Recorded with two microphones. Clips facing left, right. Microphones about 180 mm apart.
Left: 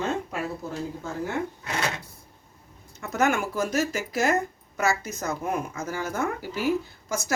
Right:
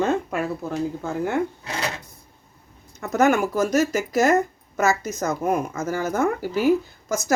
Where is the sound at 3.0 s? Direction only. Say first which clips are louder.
Right 6 dB; 40° right (ahead or behind).